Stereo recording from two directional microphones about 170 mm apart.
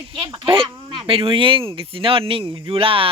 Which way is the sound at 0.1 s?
30° right (ahead or behind).